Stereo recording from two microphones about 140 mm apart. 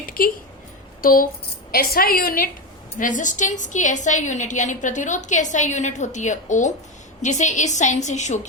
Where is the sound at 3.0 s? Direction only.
65° left (ahead or behind).